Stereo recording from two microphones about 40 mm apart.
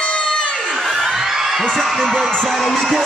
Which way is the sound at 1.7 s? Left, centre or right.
Centre.